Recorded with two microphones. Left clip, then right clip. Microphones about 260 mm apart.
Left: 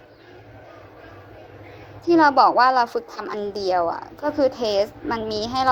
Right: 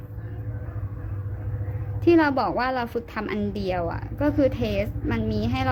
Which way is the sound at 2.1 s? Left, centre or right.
Centre.